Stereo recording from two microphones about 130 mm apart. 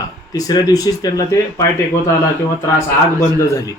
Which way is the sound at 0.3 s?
30° left (ahead or behind).